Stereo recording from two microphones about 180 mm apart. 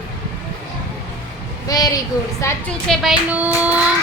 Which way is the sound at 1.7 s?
20° left (ahead or behind).